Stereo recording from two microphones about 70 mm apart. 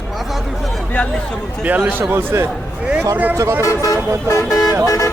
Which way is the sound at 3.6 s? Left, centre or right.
Left.